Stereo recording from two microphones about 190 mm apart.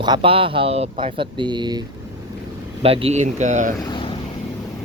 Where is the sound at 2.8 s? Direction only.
30° right (ahead or behind).